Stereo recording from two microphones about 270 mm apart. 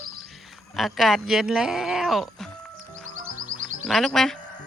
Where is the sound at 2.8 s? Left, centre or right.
Right.